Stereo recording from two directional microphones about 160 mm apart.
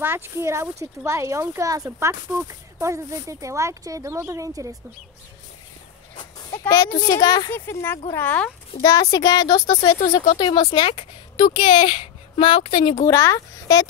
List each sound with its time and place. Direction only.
0.0 s speech: 15° right (ahead or behind)
6.7 s a child's voice: 20° left (ahead or behind)
8.8 s a child's voice: 20° left (ahead or behind)
9.9 s speech: 35° left (ahead or behind)
13.0 s a child's voice: 15° left (ahead or behind)